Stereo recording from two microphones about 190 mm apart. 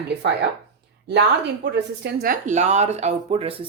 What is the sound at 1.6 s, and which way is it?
Speech, 60° right (ahead or behind).